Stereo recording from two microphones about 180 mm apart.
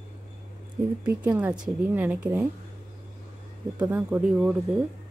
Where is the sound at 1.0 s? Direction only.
10° right (ahead or behind).